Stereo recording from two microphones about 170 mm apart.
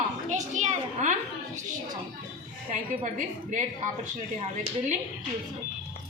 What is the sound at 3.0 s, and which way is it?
Speech, 50° right (ahead or behind).